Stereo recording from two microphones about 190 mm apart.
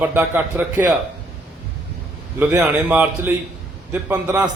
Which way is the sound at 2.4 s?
10° right (ahead or behind).